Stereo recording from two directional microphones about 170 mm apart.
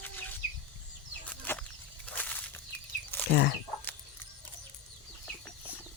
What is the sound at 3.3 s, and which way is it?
Chicken, 80° left.